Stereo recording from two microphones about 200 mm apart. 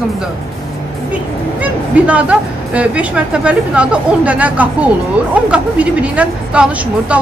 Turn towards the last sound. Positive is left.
turn(degrees=-5)  # may be behind; listen again after turning